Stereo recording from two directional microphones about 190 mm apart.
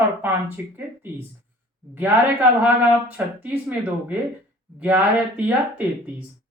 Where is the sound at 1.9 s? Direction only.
10° right (ahead or behind).